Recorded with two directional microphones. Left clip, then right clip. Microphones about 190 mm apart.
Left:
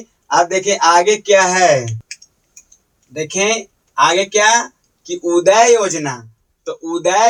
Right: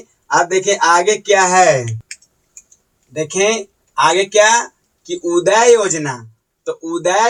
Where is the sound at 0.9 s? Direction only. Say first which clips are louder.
Left 1 dB; 15° left (ahead or behind).